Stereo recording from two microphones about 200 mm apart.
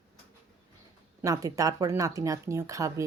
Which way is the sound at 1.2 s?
15° right (ahead or behind).